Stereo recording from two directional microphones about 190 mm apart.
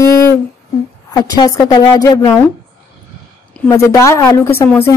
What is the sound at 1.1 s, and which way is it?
A woman's voice, 20° left (ahead or behind).